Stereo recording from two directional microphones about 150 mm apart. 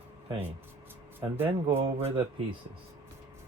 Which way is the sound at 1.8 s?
40° right (ahead or behind).